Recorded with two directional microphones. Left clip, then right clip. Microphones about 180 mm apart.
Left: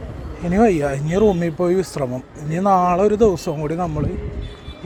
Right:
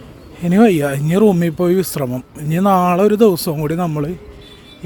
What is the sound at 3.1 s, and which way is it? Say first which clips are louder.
Speech: right 3 dB; 90° right.